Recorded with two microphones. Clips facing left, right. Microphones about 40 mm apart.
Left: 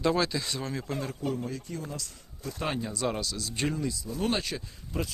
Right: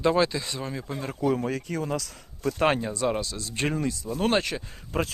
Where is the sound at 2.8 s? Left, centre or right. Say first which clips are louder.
Right 4 dB; right.